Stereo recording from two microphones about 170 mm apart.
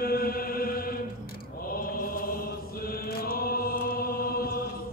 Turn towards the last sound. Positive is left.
turn(degrees=60)  # may be behind; listen again after turning